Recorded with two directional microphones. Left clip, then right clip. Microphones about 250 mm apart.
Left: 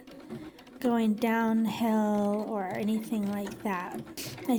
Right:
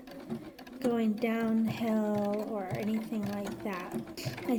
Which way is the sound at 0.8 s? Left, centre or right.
Left.